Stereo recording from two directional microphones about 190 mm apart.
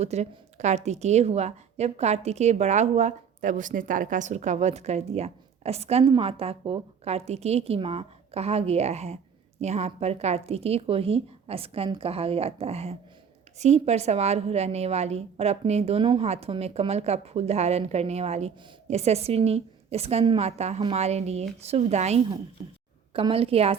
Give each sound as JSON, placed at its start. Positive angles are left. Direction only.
{"t": 0.0, "sound": "a woman's voice", "side_deg": -35}